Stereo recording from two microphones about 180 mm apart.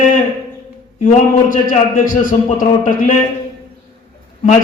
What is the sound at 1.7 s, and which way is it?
A man's voice, 45° left (ahead or behind).